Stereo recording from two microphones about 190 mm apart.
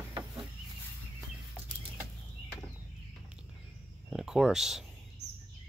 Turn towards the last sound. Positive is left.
turn(degrees=0)  # may be behind; listen again after turning